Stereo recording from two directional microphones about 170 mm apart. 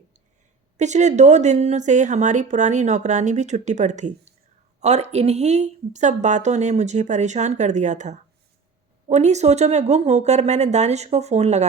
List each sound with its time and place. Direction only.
0.8 s a woman's voice: 45° right (ahead or behind)